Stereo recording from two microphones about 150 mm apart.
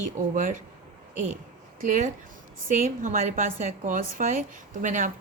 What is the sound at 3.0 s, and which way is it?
A woman's voice, 60° right (ahead or behind).